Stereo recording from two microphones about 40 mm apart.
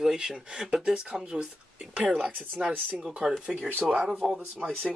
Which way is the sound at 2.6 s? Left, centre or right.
Right.